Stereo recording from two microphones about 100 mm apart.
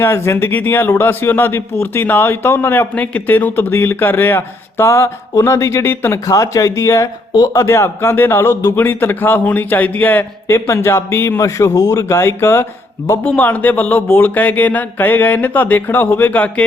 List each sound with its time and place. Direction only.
0.0 s a man's voice: 25° left (ahead or behind)